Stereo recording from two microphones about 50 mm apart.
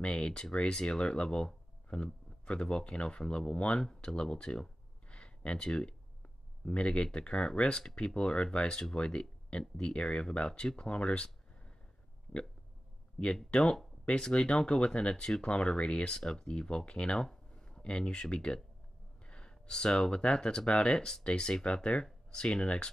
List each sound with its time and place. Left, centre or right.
0.0 s speech: centre
5.1 s a sound: left
6.6 s speech: left
13.5 s speech: centre
17.3 s a sound: centre
18.3 s speech: centre